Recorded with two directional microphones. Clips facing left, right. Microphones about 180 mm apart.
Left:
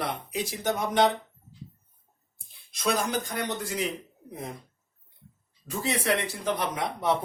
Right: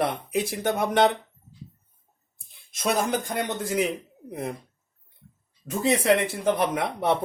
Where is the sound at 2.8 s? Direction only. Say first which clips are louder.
Right 3 dB; 50° right (ahead or behind).